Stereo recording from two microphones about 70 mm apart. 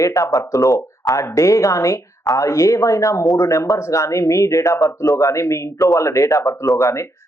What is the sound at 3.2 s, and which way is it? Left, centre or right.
Speech, left.